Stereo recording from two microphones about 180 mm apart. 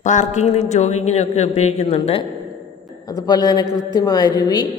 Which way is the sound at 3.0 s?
20° left (ahead or behind).